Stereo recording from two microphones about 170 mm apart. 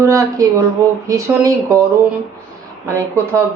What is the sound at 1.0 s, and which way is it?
Speech, 20° right (ahead or behind).